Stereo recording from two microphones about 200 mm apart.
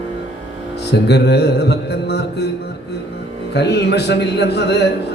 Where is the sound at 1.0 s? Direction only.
55° left (ahead or behind).